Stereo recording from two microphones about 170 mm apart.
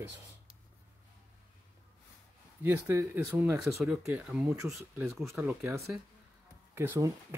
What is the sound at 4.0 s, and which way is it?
Speech, 15° right (ahead or behind).